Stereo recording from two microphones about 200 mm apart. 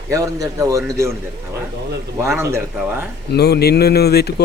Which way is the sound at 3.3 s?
55° left (ahead or behind).